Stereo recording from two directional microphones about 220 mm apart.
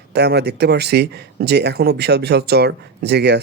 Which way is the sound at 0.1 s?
50° right (ahead or behind).